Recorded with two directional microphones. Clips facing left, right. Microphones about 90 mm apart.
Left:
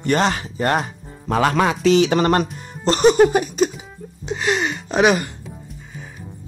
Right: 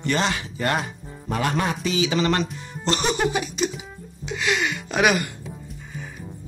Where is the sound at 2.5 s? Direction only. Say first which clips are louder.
Left 4 dB; 45° left (ahead or behind).